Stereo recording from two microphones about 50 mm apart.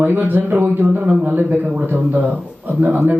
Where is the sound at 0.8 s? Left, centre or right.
Right.